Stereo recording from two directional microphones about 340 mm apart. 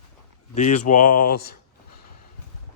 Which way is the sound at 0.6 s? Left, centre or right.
Left.